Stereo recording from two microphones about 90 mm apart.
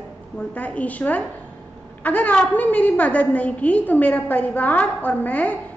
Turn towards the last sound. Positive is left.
turn(degrees=20)  # may be behind; listen again after turning